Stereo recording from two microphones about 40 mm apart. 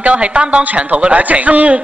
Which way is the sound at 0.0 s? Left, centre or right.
Right.